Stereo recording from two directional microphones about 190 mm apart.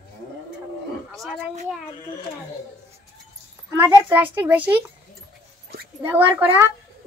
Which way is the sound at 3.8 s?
10° right (ahead or behind).